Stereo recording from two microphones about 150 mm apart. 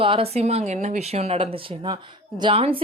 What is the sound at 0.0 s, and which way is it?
A woman's voice, 40° right (ahead or behind).